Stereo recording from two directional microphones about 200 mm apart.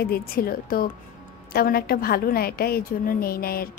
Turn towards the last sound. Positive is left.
turn(degrees=50)  # may be behind; listen again after turning